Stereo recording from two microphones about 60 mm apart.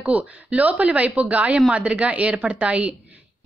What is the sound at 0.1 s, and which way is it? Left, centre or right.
A woman's voice, right.